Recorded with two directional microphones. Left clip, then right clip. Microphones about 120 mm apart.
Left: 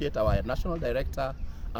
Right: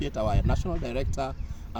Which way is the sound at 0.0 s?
40° left (ahead or behind).